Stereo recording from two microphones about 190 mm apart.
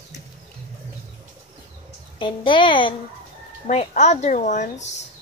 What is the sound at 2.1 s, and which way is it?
Speech, 25° left (ahead or behind).